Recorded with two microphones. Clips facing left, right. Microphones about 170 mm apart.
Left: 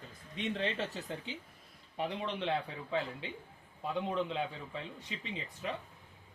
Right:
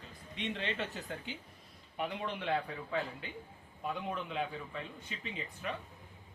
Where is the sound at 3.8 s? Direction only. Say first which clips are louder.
Left 4 dB; 30° left (ahead or behind).